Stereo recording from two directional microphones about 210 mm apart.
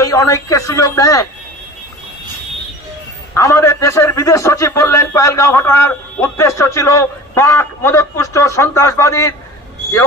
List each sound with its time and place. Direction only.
0.0 s a man's voice: 15° left (ahead or behind)
3.3 s a man's voice: 15° left (ahead or behind)